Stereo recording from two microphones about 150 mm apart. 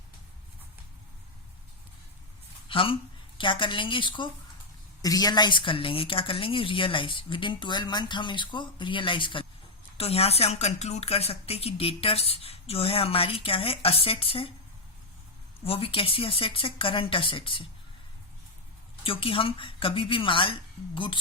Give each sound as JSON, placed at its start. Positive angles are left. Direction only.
{"t": 2.6, "sound": "a woman's voice", "side_deg": 35}
{"t": 15.6, "sound": "speech", "side_deg": 40}
{"t": 19.0, "sound": "speech", "side_deg": 35}